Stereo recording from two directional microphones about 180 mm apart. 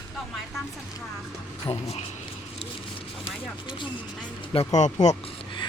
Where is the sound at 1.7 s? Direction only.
30° left (ahead or behind).